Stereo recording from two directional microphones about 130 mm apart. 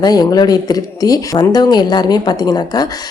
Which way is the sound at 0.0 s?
30° left (ahead or behind).